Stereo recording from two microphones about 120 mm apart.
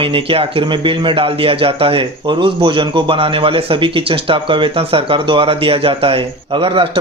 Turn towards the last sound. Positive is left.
turn(degrees=-50)  # may be behind; listen again after turning